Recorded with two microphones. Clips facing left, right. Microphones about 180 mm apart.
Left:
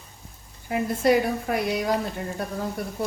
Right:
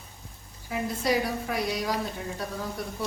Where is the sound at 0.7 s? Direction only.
55° left (ahead or behind).